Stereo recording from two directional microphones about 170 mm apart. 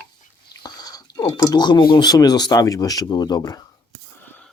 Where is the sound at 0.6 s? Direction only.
25° left (ahead or behind).